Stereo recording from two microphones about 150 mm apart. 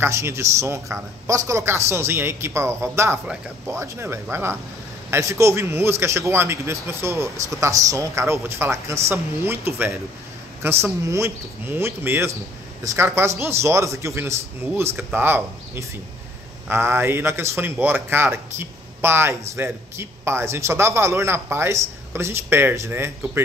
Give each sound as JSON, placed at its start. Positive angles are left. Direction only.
{"t": 0.0, "sound": "a man's voice", "side_deg": -20}